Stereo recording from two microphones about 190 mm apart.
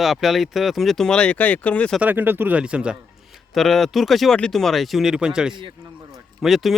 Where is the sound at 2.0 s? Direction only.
10° right (ahead or behind).